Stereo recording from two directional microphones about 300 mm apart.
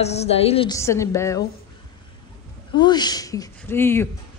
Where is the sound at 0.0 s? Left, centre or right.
Left.